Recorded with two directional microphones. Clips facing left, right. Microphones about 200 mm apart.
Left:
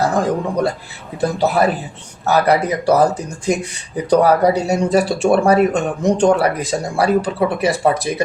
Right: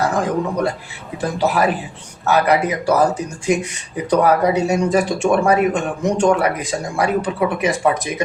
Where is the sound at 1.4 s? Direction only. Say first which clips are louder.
Even; 35° left (ahead or behind).